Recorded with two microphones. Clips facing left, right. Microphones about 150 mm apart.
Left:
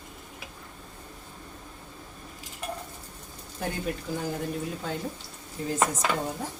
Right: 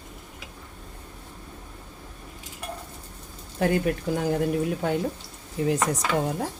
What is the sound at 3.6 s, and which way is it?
Speech, 70° right (ahead or behind).